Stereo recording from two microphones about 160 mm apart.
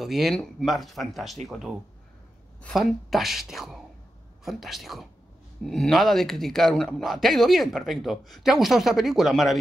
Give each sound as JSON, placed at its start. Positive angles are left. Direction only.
{"t": 0.0, "sound": "speech", "side_deg": 0}